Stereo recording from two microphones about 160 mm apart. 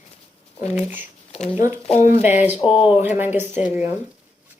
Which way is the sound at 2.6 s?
30° left (ahead or behind).